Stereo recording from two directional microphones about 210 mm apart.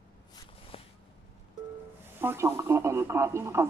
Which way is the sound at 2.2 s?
10° right (ahead or behind).